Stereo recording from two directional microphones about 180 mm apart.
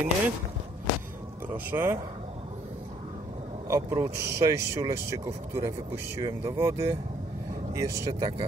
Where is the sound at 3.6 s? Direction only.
15° right (ahead or behind).